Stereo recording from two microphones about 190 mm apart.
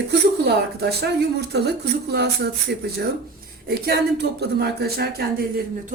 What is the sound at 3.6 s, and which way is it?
Speech, 55° right (ahead or behind).